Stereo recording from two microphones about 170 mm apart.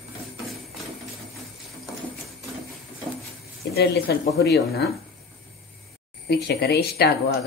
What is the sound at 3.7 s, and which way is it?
A woman's voice, 75° left (ahead or behind).